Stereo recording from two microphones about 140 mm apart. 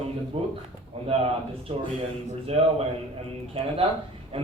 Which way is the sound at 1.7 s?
45° right (ahead or behind).